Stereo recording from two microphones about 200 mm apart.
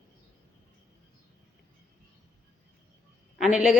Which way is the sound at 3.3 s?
5° right (ahead or behind).